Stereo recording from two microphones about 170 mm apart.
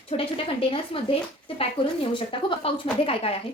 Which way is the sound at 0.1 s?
35° left (ahead or behind).